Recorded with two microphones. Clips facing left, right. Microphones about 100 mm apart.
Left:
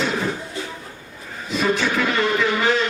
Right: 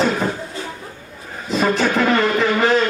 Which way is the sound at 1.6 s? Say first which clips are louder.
Right 3 dB; 45° right (ahead or behind).